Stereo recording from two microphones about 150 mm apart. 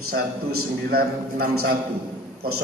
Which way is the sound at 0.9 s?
90° right.